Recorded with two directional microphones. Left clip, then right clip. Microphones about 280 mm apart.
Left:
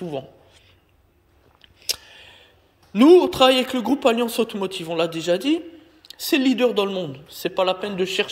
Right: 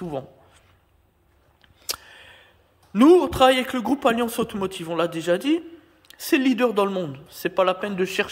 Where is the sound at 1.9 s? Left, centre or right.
Centre.